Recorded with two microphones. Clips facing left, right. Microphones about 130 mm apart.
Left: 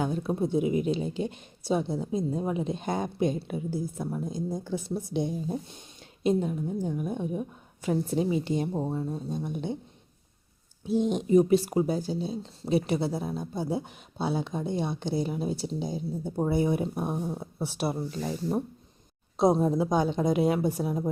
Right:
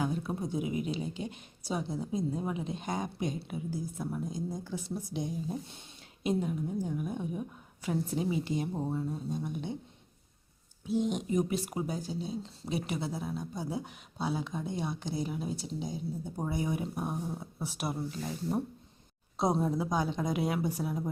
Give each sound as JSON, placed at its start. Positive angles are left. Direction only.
{"t": 0.0, "sound": "speech", "side_deg": 25}
{"t": 10.9, "sound": "speech", "side_deg": 30}